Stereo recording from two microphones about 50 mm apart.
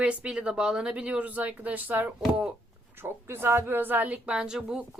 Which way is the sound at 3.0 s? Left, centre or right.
Right.